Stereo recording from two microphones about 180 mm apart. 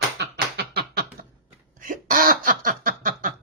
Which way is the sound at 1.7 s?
45° right (ahead or behind).